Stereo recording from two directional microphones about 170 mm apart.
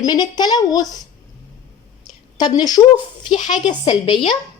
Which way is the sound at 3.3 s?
45° left (ahead or behind).